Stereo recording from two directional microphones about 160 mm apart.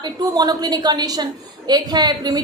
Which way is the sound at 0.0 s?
25° right (ahead or behind).